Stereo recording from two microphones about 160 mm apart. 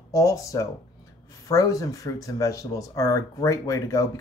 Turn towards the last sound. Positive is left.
turn(degrees=20)  # may be behind; listen again after turning